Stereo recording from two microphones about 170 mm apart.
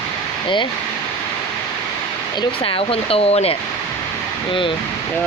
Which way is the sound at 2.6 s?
30° left (ahead or behind).